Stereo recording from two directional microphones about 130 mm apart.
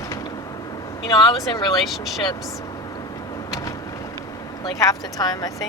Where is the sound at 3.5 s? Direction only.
25° left (ahead or behind).